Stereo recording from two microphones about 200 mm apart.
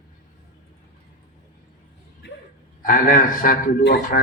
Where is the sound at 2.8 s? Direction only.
40° left (ahead or behind).